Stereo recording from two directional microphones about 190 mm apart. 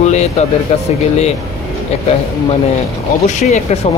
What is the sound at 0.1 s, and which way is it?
Speech, 35° left (ahead or behind).